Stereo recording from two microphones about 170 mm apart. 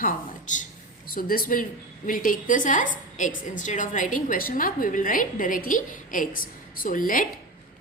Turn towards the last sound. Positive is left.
turn(degrees=55)  # may be behind; listen again after turning